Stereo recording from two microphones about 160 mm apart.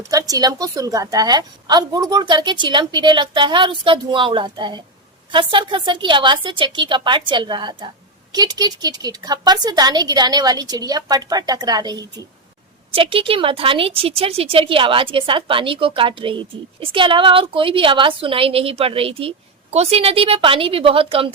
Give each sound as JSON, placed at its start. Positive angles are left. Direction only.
{"t": 0.1, "sound": "a woman's voice", "side_deg": -20}